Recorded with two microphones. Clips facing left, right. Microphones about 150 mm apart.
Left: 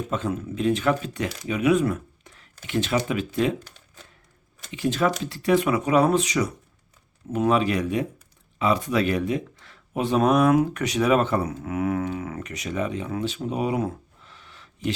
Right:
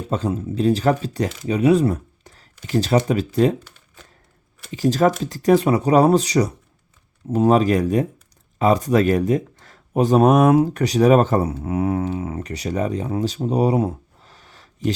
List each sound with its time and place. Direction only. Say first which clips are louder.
0.1 s speech: right 4 dB; 35° right (ahead or behind)
4.7 s speech: right 6 dB; 40° right (ahead or behind)
10.5 s speech: right 4 dB; 30° right (ahead or behind)